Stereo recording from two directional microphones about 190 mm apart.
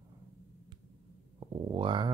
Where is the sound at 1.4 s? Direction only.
25° right (ahead or behind).